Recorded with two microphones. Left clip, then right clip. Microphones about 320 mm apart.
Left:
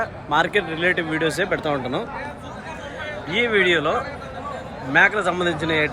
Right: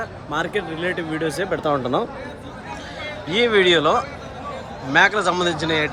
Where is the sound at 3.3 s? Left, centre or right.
Centre.